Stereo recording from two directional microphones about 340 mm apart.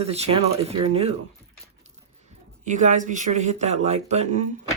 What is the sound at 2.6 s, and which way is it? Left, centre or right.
Speech, right.